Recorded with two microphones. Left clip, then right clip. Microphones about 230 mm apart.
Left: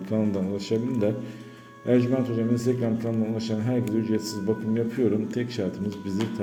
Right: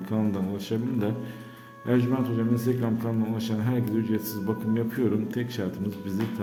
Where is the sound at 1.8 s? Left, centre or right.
Centre.